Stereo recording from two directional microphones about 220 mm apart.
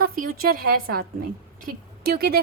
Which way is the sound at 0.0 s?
40° right (ahead or behind).